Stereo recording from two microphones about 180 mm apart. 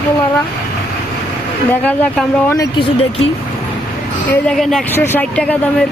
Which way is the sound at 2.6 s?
25° left (ahead or behind).